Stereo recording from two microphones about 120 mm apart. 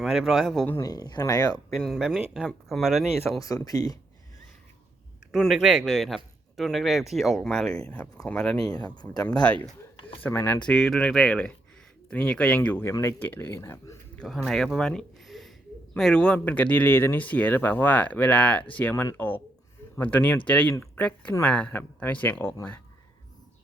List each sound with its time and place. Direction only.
0.0 s speech: 5° right (ahead or behind)
0.9 s speech: 35° left (ahead or behind)
1.7 s speech: centre (ahead or behind)
3.4 s speech: 30° left (ahead or behind)
5.3 s speech: centre (ahead or behind); by 10.6 s 15° left (ahead or behind)
10.6 s speech: 5° left (ahead or behind)
12.5 s speech: 20° left (ahead or behind)
14.2 s speech: 5° left (ahead or behind)